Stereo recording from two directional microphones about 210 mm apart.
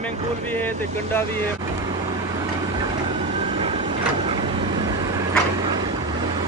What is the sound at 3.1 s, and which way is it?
Vehicle, 25° right (ahead or behind).